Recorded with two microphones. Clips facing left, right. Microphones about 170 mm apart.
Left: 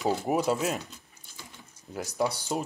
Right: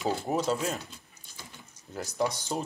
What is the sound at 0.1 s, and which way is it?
Speech, 10° left (ahead or behind).